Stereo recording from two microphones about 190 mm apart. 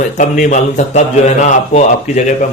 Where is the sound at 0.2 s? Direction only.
40° left (ahead or behind).